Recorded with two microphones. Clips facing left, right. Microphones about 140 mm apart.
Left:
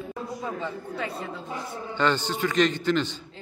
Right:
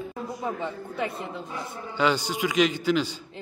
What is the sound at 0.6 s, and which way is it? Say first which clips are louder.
A woman's voice: right 1 dB; 20° right (ahead or behind).